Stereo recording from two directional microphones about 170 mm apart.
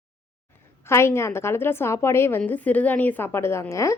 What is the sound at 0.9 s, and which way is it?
A woman's voice, 15° left (ahead or behind).